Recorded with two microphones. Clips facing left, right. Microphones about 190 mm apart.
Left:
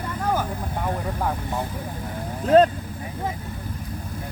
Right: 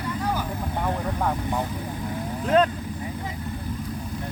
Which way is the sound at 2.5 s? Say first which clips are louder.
Left 5 dB; 35° left (ahead or behind).